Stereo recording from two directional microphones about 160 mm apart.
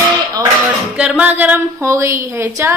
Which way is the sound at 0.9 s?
5° right (ahead or behind).